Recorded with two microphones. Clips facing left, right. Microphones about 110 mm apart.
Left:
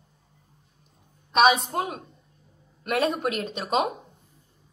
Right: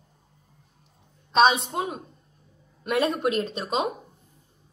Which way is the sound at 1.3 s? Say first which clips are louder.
Even; 30° right (ahead or behind).